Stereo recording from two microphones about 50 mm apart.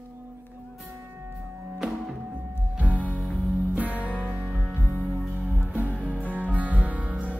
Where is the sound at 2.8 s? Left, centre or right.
Right.